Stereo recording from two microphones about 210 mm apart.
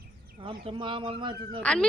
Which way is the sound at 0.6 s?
25° right (ahead or behind).